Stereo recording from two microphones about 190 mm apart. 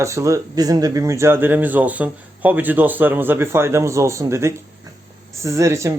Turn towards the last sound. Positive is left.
turn(degrees=-15)  # may be behind; listen again after turning